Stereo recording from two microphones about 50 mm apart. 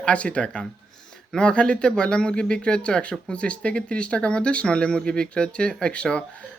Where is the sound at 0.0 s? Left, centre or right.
Left.